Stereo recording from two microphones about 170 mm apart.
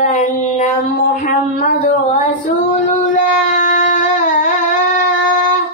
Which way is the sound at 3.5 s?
50° left (ahead or behind).